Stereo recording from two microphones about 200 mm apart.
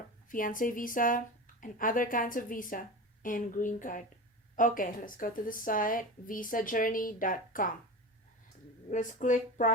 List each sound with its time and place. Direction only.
0.3 s a woman's voice: 45° left (ahead or behind)
8.9 s speech: 40° left (ahead or behind)